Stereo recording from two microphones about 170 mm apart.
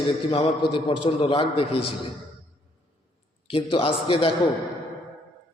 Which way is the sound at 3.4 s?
35° left (ahead or behind).